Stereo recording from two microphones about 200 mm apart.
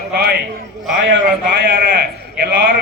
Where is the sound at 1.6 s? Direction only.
55° right (ahead or behind).